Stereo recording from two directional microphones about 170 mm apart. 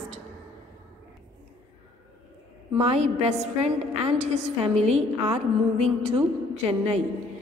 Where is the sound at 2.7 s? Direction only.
35° right (ahead or behind).